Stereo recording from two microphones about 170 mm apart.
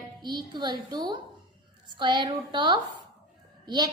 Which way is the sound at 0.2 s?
25° right (ahead or behind).